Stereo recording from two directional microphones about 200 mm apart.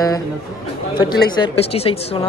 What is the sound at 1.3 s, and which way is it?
Speech, 25° left (ahead or behind).